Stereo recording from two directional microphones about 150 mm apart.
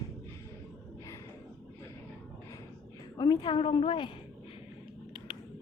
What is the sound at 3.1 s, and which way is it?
Speech, 30° left (ahead or behind).